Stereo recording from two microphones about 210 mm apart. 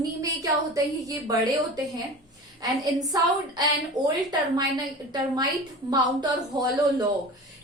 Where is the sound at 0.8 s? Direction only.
15° right (ahead or behind).